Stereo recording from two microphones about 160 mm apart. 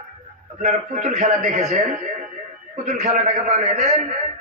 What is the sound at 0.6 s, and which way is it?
A man's voice, 50° right (ahead or behind).